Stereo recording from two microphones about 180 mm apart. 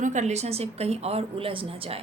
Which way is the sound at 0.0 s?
40° right (ahead or behind).